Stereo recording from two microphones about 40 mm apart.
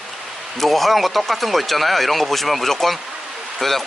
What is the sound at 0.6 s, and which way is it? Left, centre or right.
Speech, centre.